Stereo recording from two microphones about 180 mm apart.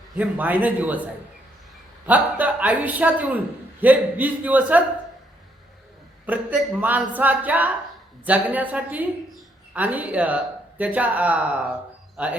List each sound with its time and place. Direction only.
0.2 s a man's voice: 10° right (ahead or behind)
6.2 s a man's voice: 5° right (ahead or behind)